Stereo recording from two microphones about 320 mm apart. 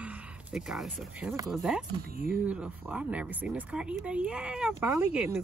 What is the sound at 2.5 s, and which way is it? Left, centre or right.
Speech, centre.